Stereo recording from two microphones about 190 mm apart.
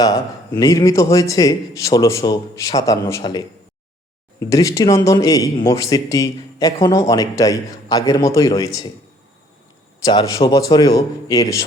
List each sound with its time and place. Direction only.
0.0 s a man's voice: 20° left (ahead or behind)
10.0 s a man's voice: 20° left (ahead or behind)